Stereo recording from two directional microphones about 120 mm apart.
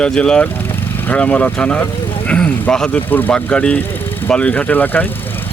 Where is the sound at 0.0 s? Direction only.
5° left (ahead or behind).